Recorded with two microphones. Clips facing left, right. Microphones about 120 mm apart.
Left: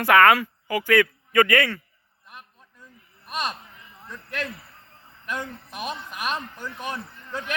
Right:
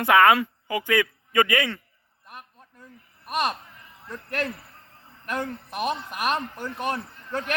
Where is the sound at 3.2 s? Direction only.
50° right (ahead or behind).